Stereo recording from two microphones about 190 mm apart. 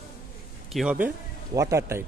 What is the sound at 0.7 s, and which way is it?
A man's voice, 5° right (ahead or behind).